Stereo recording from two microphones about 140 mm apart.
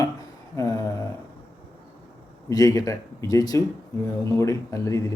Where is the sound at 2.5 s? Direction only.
25° left (ahead or behind).